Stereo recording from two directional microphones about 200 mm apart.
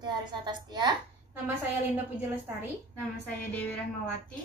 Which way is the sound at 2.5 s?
10° right (ahead or behind).